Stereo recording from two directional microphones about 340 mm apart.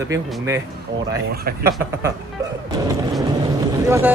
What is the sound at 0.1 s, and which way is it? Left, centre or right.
Speech, centre.